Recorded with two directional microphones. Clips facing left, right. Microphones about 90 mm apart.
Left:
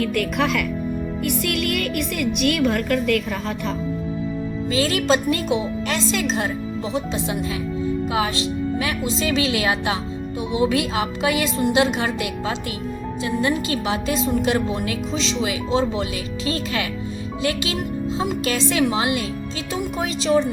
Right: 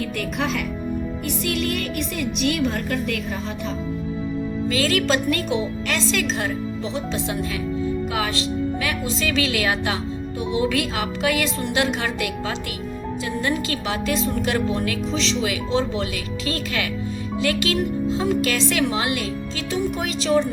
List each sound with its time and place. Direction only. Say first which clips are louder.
0.0 s a woman's voice: left 4 dB; 60° left (ahead or behind)
4.7 s speech: left 2 dB; 25° left (ahead or behind)